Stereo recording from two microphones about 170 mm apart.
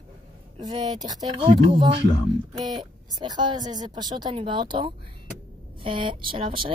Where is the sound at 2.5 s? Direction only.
25° right (ahead or behind).